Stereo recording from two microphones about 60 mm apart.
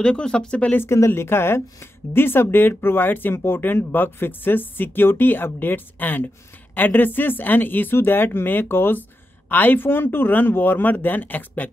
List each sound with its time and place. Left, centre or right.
0.0 s speech: centre
0.9 s speech: left